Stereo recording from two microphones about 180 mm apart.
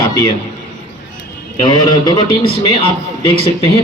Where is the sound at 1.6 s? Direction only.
25° left (ahead or behind).